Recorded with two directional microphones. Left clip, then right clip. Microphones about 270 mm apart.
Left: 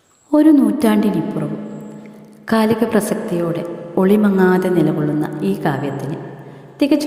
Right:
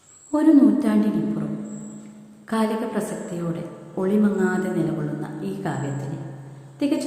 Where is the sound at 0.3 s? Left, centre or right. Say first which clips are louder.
Left 4 dB; left.